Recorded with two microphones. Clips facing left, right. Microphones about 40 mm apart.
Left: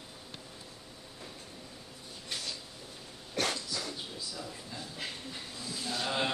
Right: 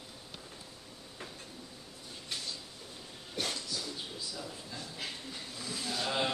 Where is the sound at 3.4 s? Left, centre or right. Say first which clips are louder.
Left 4 dB; left.